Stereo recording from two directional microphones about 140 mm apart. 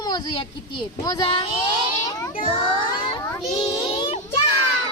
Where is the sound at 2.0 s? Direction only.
25° left (ahead or behind).